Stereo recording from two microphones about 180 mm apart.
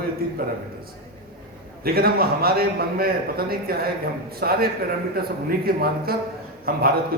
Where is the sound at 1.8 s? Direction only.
55° right (ahead or behind).